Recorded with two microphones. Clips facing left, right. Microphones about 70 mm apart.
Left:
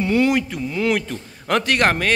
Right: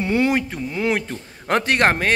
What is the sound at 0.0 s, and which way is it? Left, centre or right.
A man's voice, right.